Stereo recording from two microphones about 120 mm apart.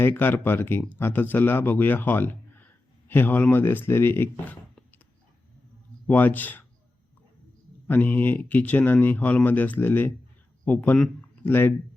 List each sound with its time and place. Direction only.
0.0 s a man's voice: 15° left (ahead or behind)
6.1 s speech: 15° left (ahead or behind)
7.9 s a man's voice: 15° left (ahead or behind)